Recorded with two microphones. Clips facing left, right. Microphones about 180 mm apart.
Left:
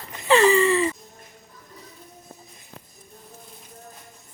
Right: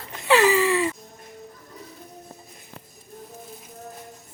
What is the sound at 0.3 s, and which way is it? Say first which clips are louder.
Gasp: left 1 dB; 5° right (ahead or behind).